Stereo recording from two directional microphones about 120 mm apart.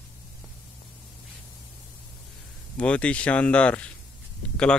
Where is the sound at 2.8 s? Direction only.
10° left (ahead or behind).